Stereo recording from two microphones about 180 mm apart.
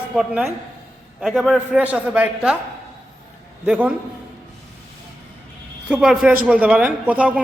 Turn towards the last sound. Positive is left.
turn(degrees=-5)  # may be behind; listen again after turning